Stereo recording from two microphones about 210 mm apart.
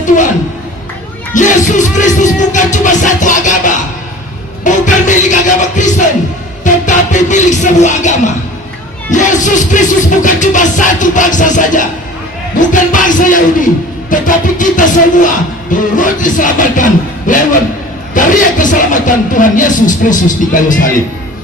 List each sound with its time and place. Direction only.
1.3 s music: 35° left (ahead or behind)